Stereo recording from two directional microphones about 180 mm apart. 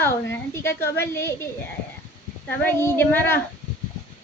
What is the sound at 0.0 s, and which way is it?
A woman's voice, 15° left (ahead or behind).